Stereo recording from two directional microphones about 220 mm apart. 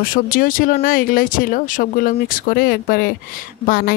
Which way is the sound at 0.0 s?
40° left (ahead or behind).